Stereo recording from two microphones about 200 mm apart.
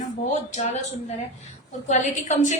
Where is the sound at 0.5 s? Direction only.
35° left (ahead or behind).